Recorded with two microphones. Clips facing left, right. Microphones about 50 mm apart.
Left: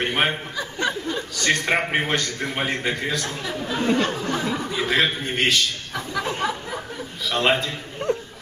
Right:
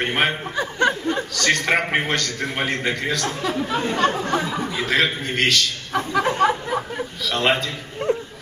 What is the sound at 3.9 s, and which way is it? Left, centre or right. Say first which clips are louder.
Chatter: right 3 dB; right.